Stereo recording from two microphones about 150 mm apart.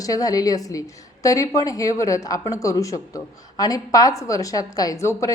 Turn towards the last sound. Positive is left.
turn(degrees=20)  # may be behind; listen again after turning